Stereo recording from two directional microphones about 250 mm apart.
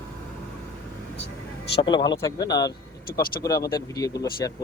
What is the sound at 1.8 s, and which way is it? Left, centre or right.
Speech, centre.